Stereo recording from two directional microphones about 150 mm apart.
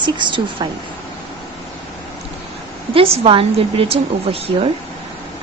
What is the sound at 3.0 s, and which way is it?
A woman's voice, 40° right (ahead or behind).